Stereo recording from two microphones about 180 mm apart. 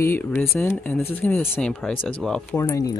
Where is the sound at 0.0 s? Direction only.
10° left (ahead or behind).